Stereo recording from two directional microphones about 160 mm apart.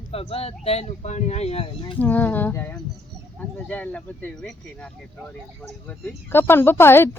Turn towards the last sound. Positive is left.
turn(degrees=15)  # may be behind; listen again after turning